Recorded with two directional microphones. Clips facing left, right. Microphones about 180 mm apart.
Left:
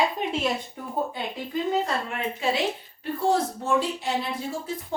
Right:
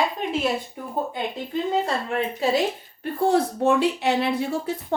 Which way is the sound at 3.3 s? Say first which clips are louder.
Right 4 dB; 65° right (ahead or behind).